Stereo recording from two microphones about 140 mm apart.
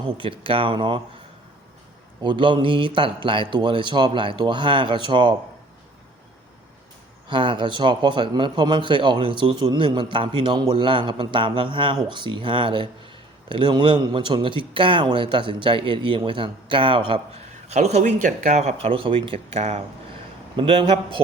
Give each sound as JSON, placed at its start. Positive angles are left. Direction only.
{"t": 0.2, "sound": "a man's voice", "side_deg": -40}
{"t": 2.2, "sound": "a man's voice", "side_deg": -35}
{"t": 7.3, "sound": "a man's voice", "side_deg": -35}
{"t": 17.7, "sound": "a man's voice", "side_deg": -55}